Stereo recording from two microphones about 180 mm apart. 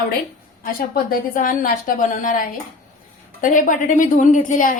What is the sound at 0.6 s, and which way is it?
A woman's voice, 55° left (ahead or behind).